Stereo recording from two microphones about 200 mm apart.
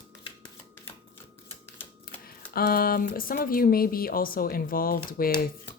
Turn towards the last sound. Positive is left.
turn(degrees=45)  # may be behind; listen again after turning